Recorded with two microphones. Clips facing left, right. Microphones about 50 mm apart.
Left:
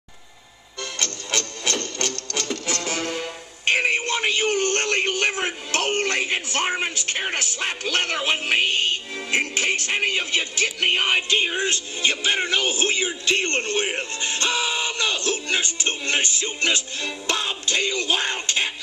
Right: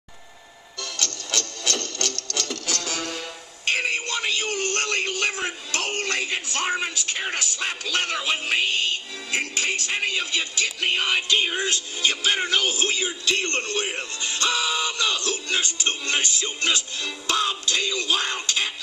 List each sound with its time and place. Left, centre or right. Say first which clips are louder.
0.9 s music: left 2 dB; left
7.1 s a man's voice: left 2 dB; left